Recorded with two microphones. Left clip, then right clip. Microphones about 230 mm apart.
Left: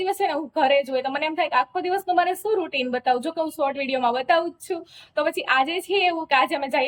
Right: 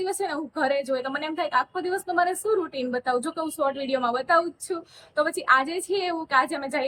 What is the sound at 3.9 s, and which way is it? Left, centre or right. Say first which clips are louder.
Speech: left 1 dB; centre.